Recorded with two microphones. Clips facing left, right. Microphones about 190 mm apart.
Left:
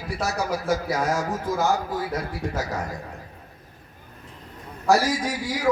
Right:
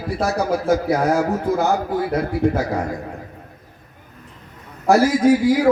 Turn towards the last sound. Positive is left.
turn(degrees=-55)  # may be behind; listen again after turning